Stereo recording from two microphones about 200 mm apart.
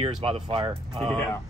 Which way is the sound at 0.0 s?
25° right (ahead or behind).